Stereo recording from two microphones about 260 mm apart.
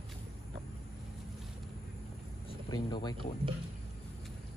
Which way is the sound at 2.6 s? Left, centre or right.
Centre.